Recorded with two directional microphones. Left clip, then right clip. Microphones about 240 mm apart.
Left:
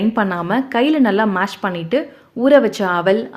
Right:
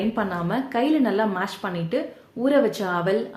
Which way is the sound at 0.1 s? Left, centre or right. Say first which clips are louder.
Left 7 dB; left.